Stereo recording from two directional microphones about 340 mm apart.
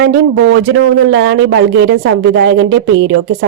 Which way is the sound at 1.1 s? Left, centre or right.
Right.